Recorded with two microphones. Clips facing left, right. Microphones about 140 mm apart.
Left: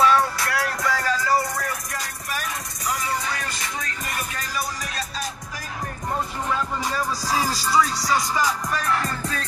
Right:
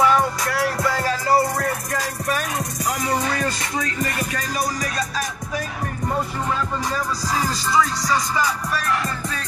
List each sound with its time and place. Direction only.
0.0 s music: 15° right (ahead or behind)
0.6 s music: 25° right (ahead or behind)
3.3 s music: 65° right (ahead or behind)
7.2 s music: 10° left (ahead or behind)